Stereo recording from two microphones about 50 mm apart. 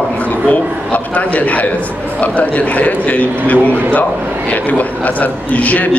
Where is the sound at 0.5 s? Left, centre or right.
Left.